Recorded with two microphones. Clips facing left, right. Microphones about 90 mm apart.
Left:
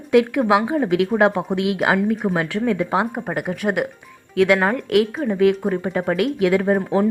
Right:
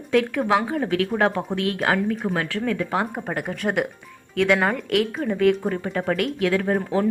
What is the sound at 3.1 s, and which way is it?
Speech, 5° left (ahead or behind).